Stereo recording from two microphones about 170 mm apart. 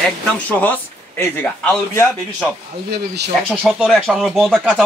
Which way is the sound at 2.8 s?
75° right (ahead or behind).